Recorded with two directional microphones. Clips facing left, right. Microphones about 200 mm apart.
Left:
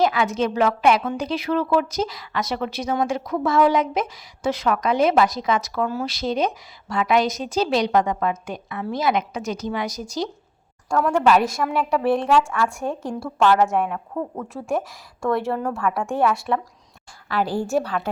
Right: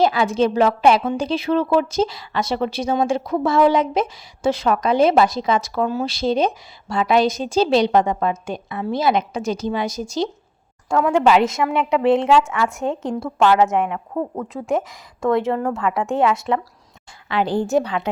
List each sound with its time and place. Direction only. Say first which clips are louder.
0.0 s a woman's voice: right 3 dB; 30° right (ahead or behind)
11.3 s a woman's voice: right 3 dB; 20° right (ahead or behind)